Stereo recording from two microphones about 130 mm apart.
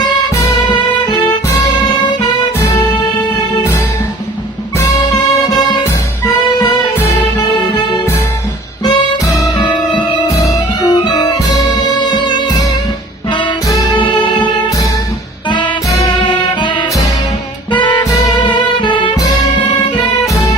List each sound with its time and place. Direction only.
0.7 s music: 30° left (ahead or behind)
4.8 s music: 20° left (ahead or behind)
8.8 s music: 25° left (ahead or behind)
14.0 s music: 35° left (ahead or behind)
18.4 s music: 35° left (ahead or behind)